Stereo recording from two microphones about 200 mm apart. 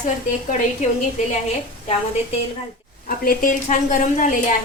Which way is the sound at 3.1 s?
45° left (ahead or behind).